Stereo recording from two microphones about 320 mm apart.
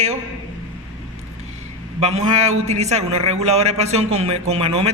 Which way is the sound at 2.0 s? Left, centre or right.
Centre.